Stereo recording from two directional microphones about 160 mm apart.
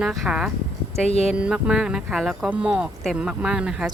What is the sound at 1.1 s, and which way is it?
Speech, 40° left (ahead or behind).